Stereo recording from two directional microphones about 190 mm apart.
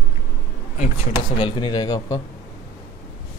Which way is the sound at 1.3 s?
25° left (ahead or behind).